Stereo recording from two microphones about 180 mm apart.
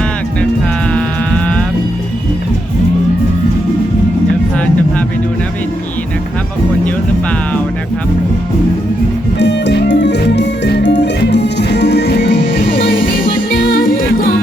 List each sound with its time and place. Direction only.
0.9 s music: 5° left (ahead or behind)
9.4 s music: 75° left (ahead or behind)
12.9 s music: 90° left